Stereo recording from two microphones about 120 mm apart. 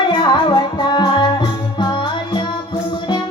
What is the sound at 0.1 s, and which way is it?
Music, 40° left (ahead or behind).